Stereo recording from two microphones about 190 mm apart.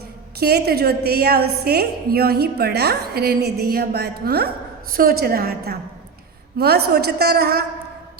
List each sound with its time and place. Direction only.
0.3 s a woman's voice: 55° right (ahead or behind)